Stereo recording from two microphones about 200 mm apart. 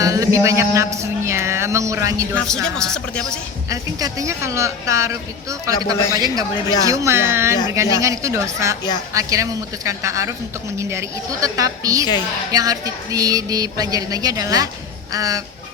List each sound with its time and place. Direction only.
0.0 s a sound: 15° right (ahead or behind)
2.3 s speech: 5° left (ahead or behind)
3.7 s speech: 15° right (ahead or behind)